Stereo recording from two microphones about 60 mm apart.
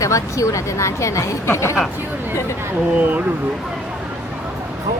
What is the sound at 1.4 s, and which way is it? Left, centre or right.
Speech, left.